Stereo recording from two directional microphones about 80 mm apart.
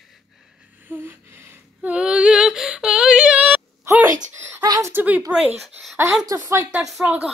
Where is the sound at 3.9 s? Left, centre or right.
Right.